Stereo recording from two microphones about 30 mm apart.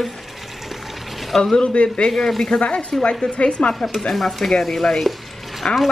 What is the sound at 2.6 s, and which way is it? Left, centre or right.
A woman's voice, left.